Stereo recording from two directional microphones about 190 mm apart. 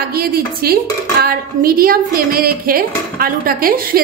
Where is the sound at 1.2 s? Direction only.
50° right (ahead or behind).